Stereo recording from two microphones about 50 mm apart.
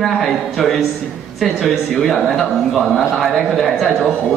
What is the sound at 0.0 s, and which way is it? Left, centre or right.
A man's voice, centre.